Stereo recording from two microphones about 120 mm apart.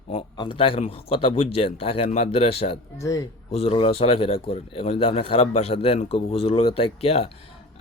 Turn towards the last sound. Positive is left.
turn(degrees=55)  # may be behind; listen again after turning